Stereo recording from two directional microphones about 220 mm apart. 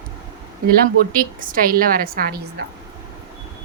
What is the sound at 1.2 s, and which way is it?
A woman's voice, 40° right (ahead or behind).